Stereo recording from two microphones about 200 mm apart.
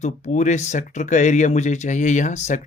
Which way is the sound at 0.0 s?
35° left (ahead or behind).